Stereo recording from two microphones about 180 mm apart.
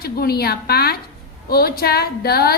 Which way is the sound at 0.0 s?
60° left (ahead or behind).